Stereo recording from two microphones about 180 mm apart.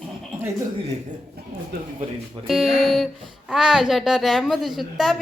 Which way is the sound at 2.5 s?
Centre (ahead or behind).